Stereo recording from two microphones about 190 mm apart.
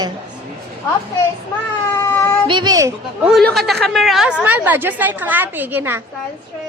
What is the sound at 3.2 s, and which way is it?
A woman's voice, centre (ahead or behind).